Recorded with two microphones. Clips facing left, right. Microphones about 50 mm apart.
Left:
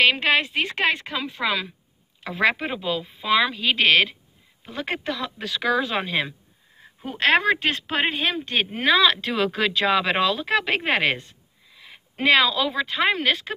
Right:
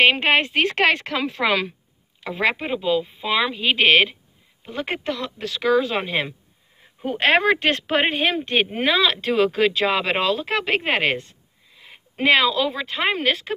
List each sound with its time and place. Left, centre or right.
0.0 s speech: right
0.5 s speech: right
2.2 s speech: centre
4.6 s speech: centre
5.2 s speech: centre
7.1 s speech: right
9.0 s a woman's voice: centre